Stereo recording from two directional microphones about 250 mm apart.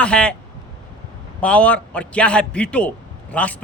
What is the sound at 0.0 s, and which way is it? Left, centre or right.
Speech, centre.